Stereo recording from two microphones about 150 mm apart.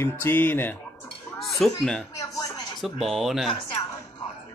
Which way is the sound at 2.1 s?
25° left (ahead or behind).